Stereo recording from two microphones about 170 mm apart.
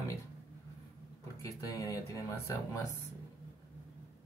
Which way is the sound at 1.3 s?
20° left (ahead or behind).